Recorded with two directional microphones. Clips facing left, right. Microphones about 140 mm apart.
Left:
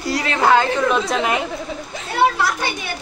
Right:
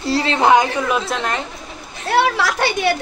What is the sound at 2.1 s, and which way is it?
Speech, 90° right.